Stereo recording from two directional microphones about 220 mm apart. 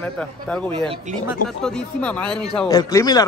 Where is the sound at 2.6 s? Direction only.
15° left (ahead or behind).